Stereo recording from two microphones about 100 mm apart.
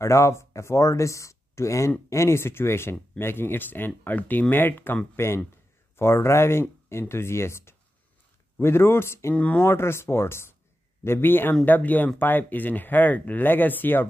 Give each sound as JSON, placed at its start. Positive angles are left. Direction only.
{"t": 0.0, "sound": "speech", "side_deg": 30}
{"t": 9.3, "sound": "speech", "side_deg": 15}